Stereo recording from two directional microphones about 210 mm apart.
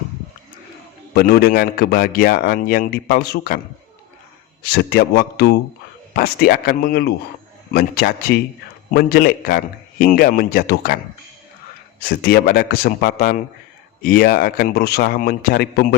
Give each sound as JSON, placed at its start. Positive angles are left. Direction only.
{"t": 1.1, "sound": "a man's voice", "side_deg": 50}
{"t": 4.6, "sound": "a man's voice", "side_deg": 50}
{"t": 11.9, "sound": "a man's voice", "side_deg": 45}